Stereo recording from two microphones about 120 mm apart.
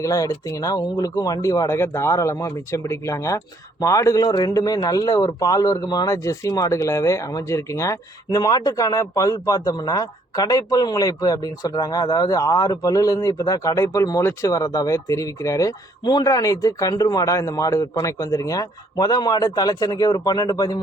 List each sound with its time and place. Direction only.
0.0 s speech: 25° left (ahead or behind)